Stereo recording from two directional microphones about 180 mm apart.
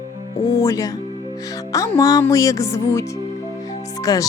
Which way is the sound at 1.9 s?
20° left (ahead or behind).